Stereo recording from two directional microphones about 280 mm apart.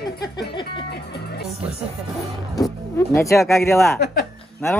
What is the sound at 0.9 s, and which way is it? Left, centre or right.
Speech, left.